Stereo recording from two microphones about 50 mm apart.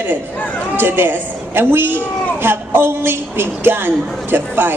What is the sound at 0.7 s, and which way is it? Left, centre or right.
A woman's voice, right.